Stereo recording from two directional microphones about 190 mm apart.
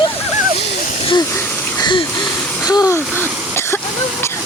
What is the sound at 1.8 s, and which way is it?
Wheeze, 25° left (ahead or behind).